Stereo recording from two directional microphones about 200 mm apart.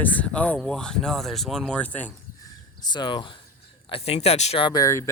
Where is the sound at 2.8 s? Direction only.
20° left (ahead or behind).